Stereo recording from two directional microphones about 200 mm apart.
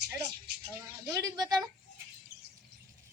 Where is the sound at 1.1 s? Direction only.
20° right (ahead or behind).